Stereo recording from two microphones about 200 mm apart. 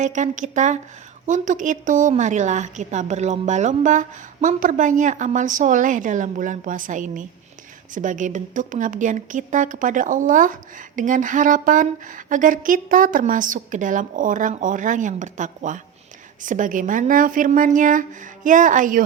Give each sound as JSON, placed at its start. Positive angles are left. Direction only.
{"t": 0.0, "sound": "a woman's voice", "side_deg": -40}